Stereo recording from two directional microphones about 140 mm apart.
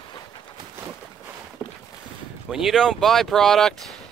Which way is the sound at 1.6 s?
15° right (ahead or behind).